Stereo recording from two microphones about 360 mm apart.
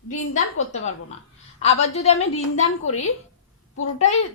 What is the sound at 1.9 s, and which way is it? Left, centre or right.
A woman's voice, centre.